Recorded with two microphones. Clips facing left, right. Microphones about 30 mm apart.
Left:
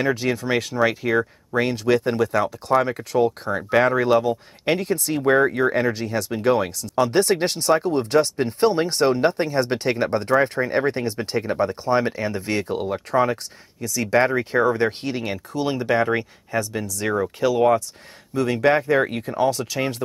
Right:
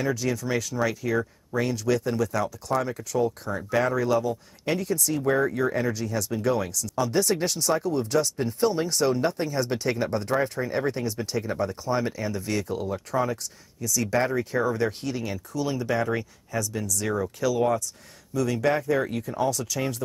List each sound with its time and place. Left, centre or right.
0.0 s speech: left